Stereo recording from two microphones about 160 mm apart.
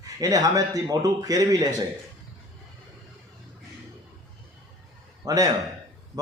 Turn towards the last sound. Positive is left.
turn(degrees=-20)  # may be behind; listen again after turning